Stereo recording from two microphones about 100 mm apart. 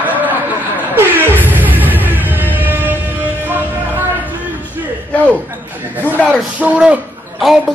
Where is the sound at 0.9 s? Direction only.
20° right (ahead or behind).